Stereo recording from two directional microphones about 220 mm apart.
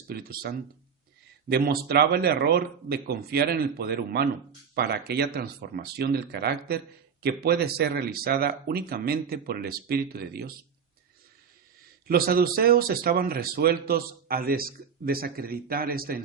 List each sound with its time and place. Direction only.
0.1 s speech: 45° right (ahead or behind)
12.0 s speech: 40° right (ahead or behind)